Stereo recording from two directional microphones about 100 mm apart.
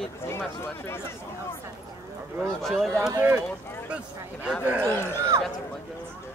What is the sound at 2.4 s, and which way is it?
Speech, centre (ahead or behind).